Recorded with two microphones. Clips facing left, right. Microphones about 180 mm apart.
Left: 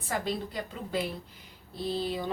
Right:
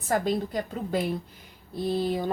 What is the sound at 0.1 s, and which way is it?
Speech, 45° right (ahead or behind).